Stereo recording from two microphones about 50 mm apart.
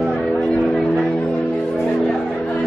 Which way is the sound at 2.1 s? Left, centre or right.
Centre.